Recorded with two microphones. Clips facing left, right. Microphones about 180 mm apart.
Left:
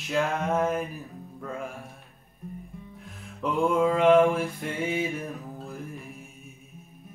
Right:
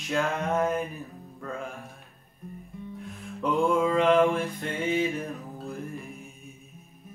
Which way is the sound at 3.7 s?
5° left (ahead or behind).